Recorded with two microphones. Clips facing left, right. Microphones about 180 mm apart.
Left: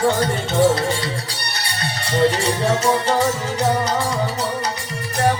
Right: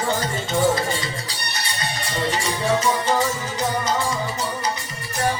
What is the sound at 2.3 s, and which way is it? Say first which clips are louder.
Music: left 2 dB; 65° left (ahead or behind).